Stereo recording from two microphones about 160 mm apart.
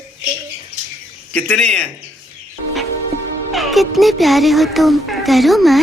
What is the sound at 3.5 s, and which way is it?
Speech, centre (ahead or behind).